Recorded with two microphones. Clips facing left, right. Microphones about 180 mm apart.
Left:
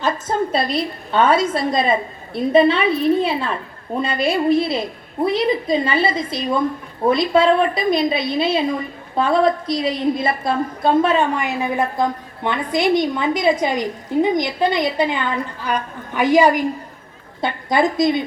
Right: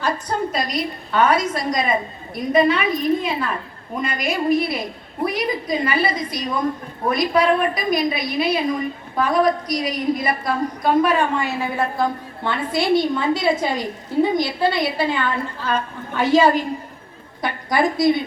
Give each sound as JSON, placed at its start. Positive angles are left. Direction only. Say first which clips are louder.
{"t": 0.0, "sound": "a woman's voice", "louder": "left 2 dB", "side_deg": 25}